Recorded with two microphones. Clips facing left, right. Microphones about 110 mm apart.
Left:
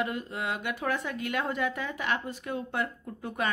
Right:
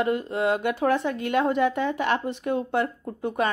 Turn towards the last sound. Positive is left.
turn(degrees=-30)  # may be behind; listen again after turning